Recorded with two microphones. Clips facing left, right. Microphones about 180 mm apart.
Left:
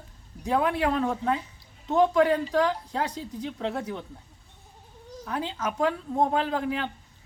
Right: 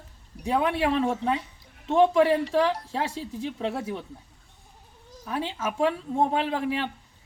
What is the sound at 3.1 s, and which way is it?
Speech, 30° right (ahead or behind).